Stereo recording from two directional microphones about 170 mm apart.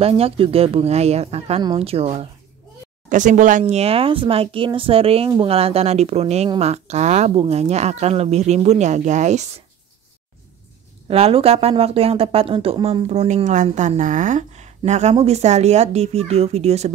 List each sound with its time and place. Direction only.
0.0 s speech: 35° right (ahead or behind)
3.1 s speech: 50° right (ahead or behind)
11.1 s speech: 35° right (ahead or behind)
13.1 s a woman's voice: 45° right (ahead or behind)